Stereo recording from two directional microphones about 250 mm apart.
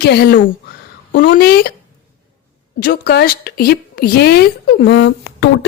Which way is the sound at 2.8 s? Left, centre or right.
Left.